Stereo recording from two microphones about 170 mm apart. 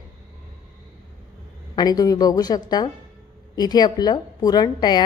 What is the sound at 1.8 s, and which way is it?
A woman's voice, 20° left (ahead or behind).